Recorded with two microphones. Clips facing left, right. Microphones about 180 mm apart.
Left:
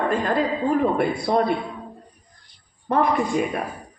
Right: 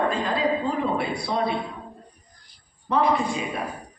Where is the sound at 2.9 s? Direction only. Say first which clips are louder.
Left 2 dB; 50° left (ahead or behind).